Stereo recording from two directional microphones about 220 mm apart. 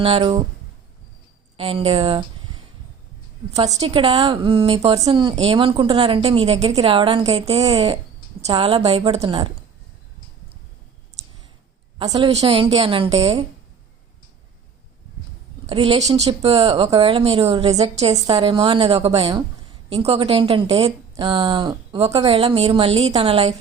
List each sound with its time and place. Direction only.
0.0 s speech: 25° right (ahead or behind)
1.5 s speech: 25° right (ahead or behind)
3.5 s a woman's voice: 15° right (ahead or behind)
11.9 s speech: 20° right (ahead or behind)
15.6 s speech: 25° right (ahead or behind)